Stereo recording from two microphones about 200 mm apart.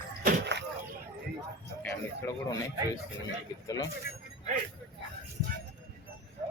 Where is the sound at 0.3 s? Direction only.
60° right (ahead or behind).